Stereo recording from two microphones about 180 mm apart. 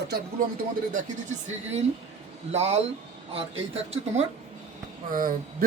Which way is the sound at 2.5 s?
35° right (ahead or behind).